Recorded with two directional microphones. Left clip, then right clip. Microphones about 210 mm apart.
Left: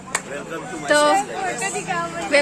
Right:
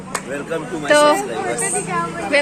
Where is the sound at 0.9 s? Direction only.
10° left (ahead or behind).